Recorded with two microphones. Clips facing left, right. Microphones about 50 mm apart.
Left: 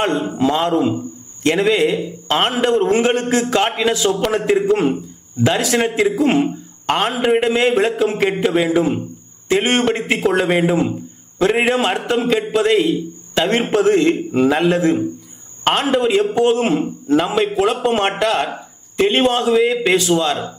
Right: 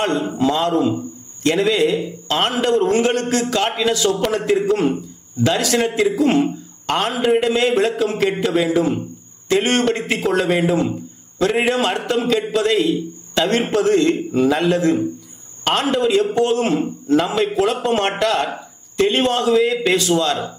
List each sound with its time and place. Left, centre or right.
0.0 s a man's voice: centre